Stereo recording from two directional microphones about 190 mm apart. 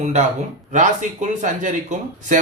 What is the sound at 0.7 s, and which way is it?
Speech, 40° right (ahead or behind).